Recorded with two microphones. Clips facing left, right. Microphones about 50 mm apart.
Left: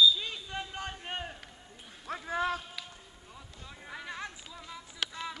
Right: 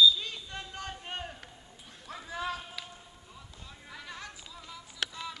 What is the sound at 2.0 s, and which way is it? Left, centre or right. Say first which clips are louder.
Clip-clop: left 4 dB; left.